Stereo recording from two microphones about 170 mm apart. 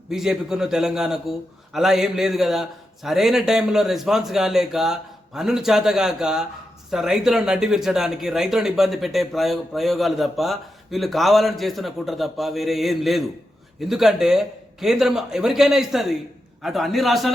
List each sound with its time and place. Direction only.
0.1 s speech: centre (ahead or behind)